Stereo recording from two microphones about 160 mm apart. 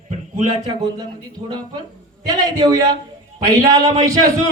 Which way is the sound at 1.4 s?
25° right (ahead or behind).